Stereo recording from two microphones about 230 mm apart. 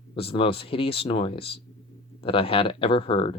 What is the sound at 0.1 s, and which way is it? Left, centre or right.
Speech, left.